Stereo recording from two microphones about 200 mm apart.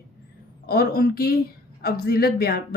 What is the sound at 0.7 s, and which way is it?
Speech, 50° left (ahead or behind).